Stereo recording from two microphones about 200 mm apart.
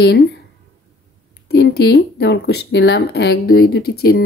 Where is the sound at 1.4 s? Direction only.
55° left (ahead or behind).